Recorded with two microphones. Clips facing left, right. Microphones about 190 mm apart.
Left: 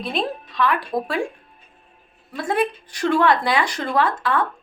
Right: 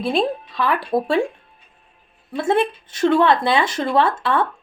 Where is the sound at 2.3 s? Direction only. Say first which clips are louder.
Right 3 dB; 25° right (ahead or behind).